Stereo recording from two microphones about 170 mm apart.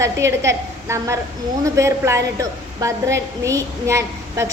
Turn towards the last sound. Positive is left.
turn(degrees=-15)  # may be behind; listen again after turning